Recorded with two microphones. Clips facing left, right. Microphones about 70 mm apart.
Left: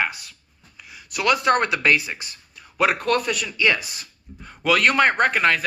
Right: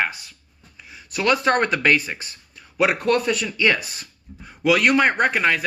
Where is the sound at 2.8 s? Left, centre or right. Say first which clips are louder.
Right 1 dB; right.